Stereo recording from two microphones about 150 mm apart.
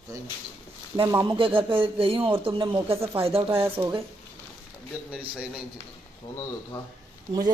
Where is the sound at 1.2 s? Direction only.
35° right (ahead or behind).